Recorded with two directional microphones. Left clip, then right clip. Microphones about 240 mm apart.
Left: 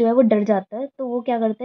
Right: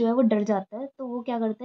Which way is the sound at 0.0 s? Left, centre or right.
Left.